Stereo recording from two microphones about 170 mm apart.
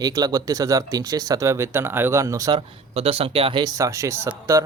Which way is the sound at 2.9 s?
35° right (ahead or behind).